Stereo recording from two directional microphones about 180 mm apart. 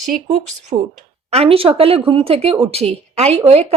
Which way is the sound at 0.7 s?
30° right (ahead or behind).